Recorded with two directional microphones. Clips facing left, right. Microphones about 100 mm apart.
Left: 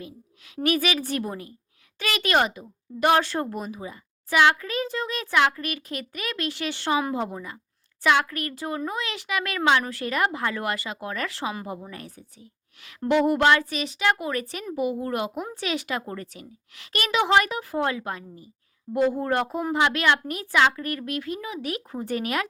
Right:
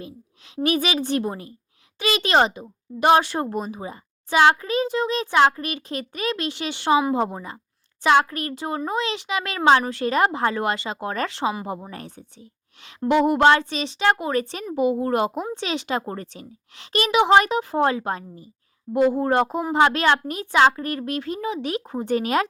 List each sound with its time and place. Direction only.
0.0 s a child's voice: 25° right (ahead or behind)
15.5 s a child's voice: 25° right (ahead or behind)
18.9 s a child's voice: 20° right (ahead or behind)